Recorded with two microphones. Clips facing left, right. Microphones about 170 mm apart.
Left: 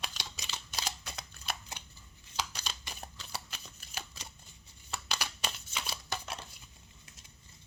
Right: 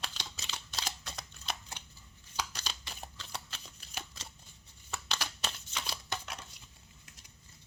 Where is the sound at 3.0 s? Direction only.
5° left (ahead or behind).